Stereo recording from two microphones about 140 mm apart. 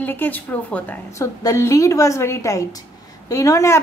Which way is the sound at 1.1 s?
20° left (ahead or behind).